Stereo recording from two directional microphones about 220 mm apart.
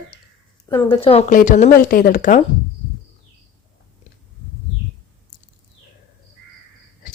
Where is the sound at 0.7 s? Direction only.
15° left (ahead or behind); by 2.4 s 35° left (ahead or behind).